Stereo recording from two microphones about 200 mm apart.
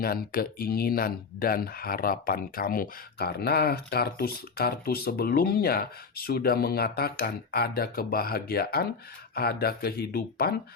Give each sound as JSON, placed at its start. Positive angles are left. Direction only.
{"t": 0.0, "sound": "speech", "side_deg": 50}